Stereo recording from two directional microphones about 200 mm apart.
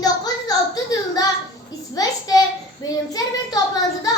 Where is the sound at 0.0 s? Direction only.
20° left (ahead or behind).